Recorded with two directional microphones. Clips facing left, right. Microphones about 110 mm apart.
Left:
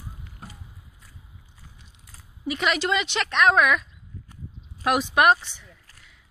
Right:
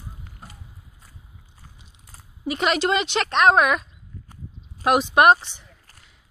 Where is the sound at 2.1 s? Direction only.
35° right (ahead or behind).